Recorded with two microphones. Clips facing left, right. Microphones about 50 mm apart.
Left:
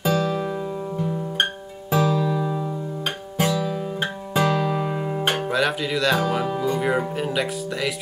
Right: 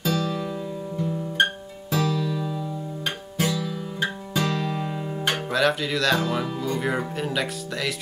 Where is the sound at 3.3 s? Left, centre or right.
Centre.